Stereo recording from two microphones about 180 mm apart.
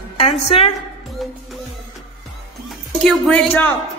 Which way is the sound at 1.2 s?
Centre (ahead or behind).